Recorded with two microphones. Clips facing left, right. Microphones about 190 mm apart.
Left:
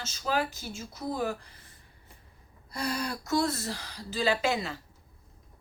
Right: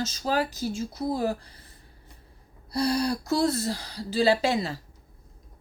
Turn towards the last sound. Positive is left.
turn(degrees=-35)  # may be behind; listen again after turning